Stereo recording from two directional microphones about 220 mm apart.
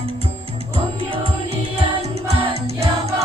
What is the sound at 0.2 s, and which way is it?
Music, 25° right (ahead or behind).